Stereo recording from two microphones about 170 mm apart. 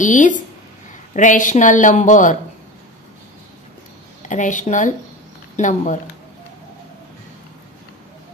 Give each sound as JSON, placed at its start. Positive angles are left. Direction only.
{"t": 0.0, "sound": "speech", "side_deg": 50}
{"t": 4.3, "sound": "speech", "side_deg": 50}